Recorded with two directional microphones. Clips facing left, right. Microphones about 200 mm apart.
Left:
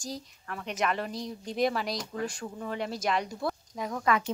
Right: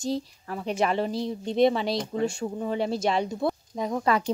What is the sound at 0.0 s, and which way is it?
Speech, 25° right (ahead or behind).